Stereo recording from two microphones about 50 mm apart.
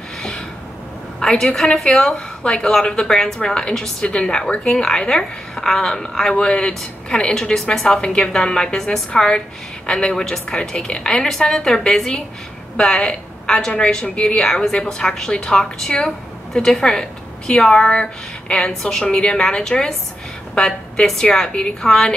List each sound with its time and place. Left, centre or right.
1.2 s a woman's voice: centre
7.5 s a woman's voice: centre
7.8 s a woman's voice: centre